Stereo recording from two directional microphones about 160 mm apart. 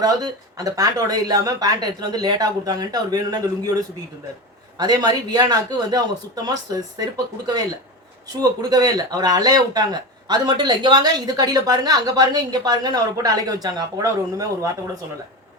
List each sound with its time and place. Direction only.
0.0 s a woman's voice: 25° right (ahead or behind)